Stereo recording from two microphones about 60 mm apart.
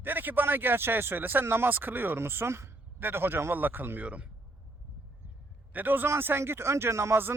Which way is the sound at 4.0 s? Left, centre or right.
Right.